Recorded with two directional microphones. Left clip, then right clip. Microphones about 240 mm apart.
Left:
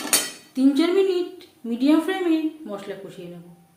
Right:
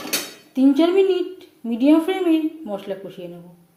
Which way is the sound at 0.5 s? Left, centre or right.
Centre.